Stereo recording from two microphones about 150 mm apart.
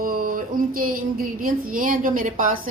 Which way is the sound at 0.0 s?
70° right (ahead or behind).